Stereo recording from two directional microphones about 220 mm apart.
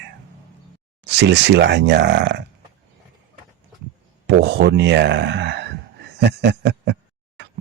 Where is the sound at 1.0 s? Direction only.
50° right (ahead or behind).